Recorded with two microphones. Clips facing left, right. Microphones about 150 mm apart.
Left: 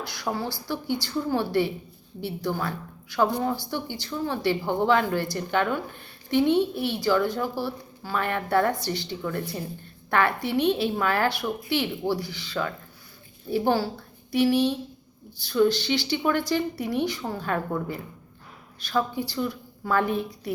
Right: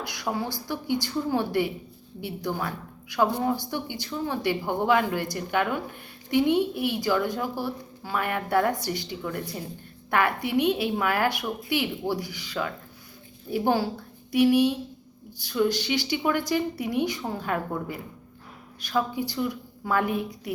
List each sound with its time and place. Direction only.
0.0 s a woman's voice: 15° right (ahead or behind)